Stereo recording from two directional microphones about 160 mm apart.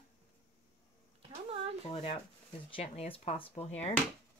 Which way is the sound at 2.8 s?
40° left (ahead or behind).